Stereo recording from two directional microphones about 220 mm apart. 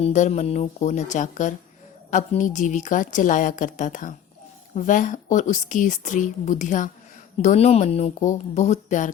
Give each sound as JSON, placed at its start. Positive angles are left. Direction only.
{"t": 0.0, "sound": "a woman's voice", "side_deg": 30}